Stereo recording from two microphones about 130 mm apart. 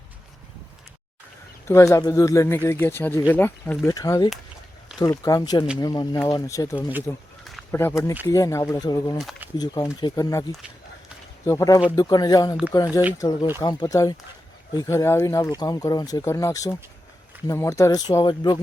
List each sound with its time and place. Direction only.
1.6 s speech: 20° left (ahead or behind)
3.8 s speech: 25° left (ahead or behind)
11.4 s speech: 25° left (ahead or behind)